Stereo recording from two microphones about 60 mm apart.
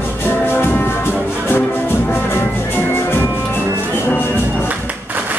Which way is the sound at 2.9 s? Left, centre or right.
Left.